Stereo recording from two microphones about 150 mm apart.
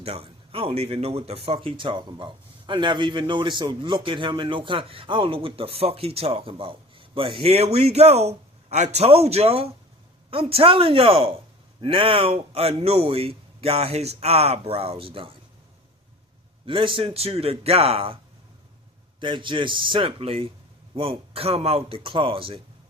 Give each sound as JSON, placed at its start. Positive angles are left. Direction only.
{"t": 0.0, "sound": "a man's voice", "side_deg": -40}
{"t": 16.6, "sound": "speech", "side_deg": -35}
{"t": 19.2, "sound": "speech", "side_deg": -35}